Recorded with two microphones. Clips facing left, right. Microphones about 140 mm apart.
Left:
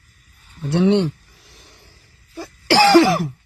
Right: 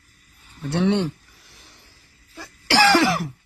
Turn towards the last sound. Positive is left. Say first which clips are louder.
# left 5 dB
turn(degrees=25)  # may be behind; listen again after turning